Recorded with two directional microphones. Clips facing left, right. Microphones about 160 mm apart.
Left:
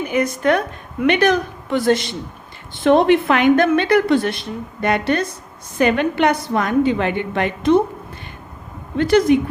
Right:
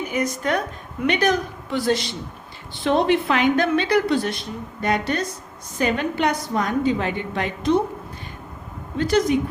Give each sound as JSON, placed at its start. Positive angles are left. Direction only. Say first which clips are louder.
{"t": 0.1, "sound": "a woman's voice", "louder": "left 7 dB", "side_deg": 65}
{"t": 9.0, "sound": "a woman's voice", "louder": "left 5 dB", "side_deg": 60}